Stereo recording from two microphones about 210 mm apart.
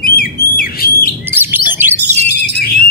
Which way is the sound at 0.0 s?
45° left (ahead or behind).